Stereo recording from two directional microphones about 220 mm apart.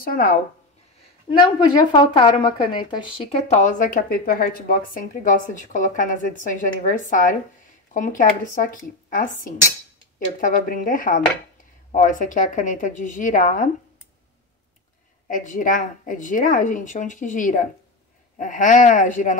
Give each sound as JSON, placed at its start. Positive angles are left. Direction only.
{"t": 0.0, "sound": "a woman's voice", "side_deg": 40}
{"t": 1.4, "sound": "a woman's voice", "side_deg": 20}
{"t": 15.2, "sound": "a woman's voice", "side_deg": 35}